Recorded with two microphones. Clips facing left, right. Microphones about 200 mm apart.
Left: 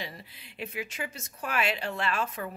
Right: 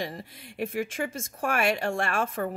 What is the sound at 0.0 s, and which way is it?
A woman's voice, 50° right (ahead or behind).